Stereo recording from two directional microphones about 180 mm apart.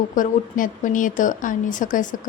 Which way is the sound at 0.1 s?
50° left (ahead or behind).